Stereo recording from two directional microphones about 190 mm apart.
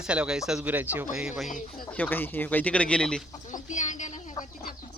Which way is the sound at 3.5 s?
40° left (ahead or behind).